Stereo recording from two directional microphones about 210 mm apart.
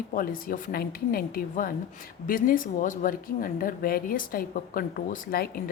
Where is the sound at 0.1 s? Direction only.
40° left (ahead or behind).